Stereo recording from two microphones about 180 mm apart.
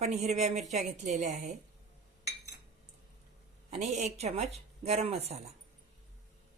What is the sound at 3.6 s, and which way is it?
Speech, 40° right (ahead or behind).